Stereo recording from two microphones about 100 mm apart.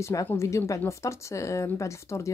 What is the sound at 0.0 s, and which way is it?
Speech, 35° left (ahead or behind).